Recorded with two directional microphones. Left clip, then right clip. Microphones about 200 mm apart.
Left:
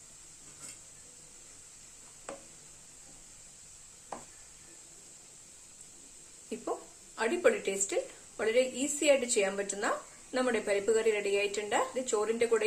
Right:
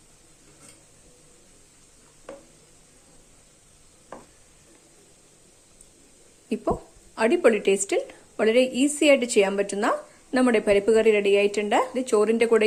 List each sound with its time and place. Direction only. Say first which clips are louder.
7.2 s speech: right 8 dB; 40° right (ahead or behind)